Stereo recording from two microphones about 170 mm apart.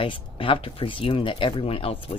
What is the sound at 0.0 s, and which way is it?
Speech, 30° left (ahead or behind).